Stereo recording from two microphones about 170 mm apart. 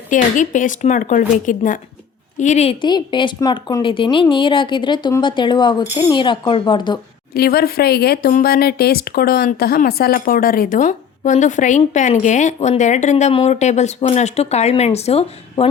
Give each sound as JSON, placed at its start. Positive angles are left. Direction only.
{"t": 0.1, "sound": "a woman's voice", "side_deg": 50}
{"t": 2.8, "sound": "speech", "side_deg": 25}
{"t": 7.3, "sound": "a woman's voice", "side_deg": 65}